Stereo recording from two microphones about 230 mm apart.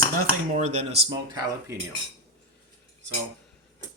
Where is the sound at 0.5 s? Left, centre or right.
Right.